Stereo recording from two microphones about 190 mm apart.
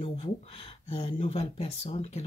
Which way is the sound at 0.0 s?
30° left (ahead or behind).